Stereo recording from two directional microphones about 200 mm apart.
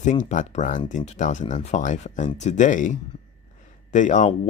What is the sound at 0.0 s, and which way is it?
Speech, 35° left (ahead or behind).